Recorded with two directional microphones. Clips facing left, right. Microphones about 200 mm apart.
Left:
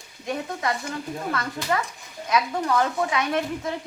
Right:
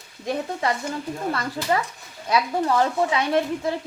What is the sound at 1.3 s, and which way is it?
Speech, 30° right (ahead or behind).